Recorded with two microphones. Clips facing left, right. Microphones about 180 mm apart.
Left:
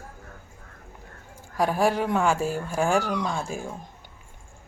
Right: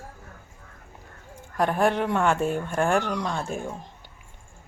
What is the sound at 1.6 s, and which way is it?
Speech, 5° left (ahead or behind).